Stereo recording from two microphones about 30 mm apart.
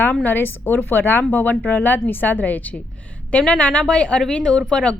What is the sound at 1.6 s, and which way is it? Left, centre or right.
A woman's voice, left.